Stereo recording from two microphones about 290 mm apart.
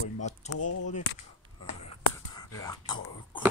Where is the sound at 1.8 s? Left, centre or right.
Centre.